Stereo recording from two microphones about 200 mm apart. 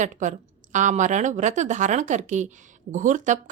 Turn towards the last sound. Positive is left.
turn(degrees=-40)  # may be behind; listen again after turning